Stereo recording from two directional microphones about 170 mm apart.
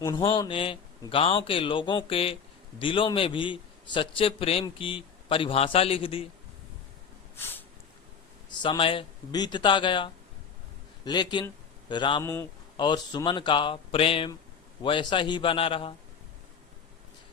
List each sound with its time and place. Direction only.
0.0 s a man's voice: 20° left (ahead or behind)
7.3 s snort: 15° left (ahead or behind)
8.4 s speech: 25° left (ahead or behind)
12.2 s speech: 15° left (ahead or behind)
12.7 s a man's voice: 25° left (ahead or behind)